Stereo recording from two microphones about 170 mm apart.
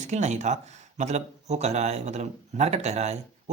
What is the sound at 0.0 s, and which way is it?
Speech, 45° right (ahead or behind).